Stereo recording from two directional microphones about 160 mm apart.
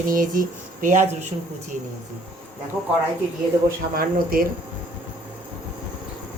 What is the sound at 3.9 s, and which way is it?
Speech, 65° right (ahead or behind).